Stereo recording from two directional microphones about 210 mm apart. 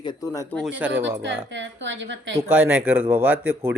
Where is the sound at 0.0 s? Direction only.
20° left (ahead or behind).